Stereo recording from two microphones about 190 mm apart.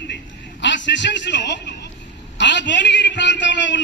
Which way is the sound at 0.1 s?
70° left (ahead or behind).